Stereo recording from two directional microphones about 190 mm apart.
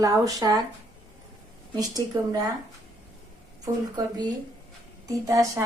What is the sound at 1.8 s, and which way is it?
Speech, 20° right (ahead or behind).